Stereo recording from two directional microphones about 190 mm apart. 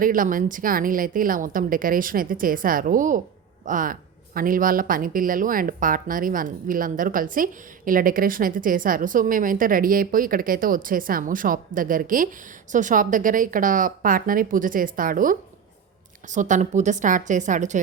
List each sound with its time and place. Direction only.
0.0 s a woman's voice: 45° right (ahead or behind)